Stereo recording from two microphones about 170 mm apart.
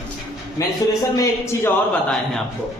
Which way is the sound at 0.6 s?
20° left (ahead or behind).